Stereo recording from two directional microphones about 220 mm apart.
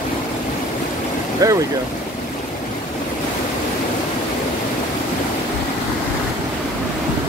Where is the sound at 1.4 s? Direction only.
15° right (ahead or behind).